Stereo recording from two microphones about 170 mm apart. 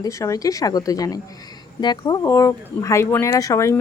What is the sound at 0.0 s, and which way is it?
A woman's voice, 20° left (ahead or behind).